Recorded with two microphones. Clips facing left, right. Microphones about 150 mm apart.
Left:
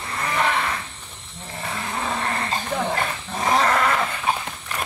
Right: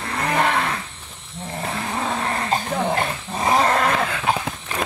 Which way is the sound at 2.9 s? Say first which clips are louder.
Right 2 dB; 25° right (ahead or behind).